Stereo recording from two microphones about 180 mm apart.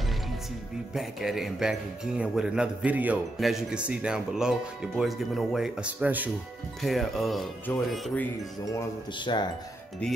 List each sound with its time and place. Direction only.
0.9 s a man's voice: centre (ahead or behind)
8.7 s speech: 25° left (ahead or behind)